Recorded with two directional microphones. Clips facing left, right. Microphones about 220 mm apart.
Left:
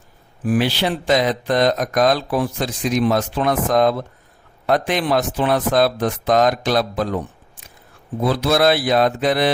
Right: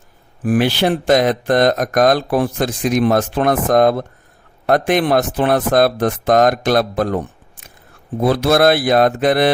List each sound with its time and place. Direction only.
0.4 s speech: 50° right (ahead or behind)
8.2 s speech: 50° right (ahead or behind)